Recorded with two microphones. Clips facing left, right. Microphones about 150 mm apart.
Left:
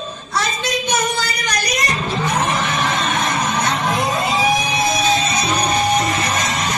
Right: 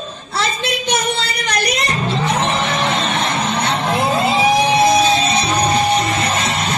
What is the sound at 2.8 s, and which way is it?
Music, 30° right (ahead or behind).